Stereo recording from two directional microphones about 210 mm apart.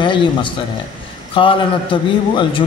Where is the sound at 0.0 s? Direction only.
25° left (ahead or behind).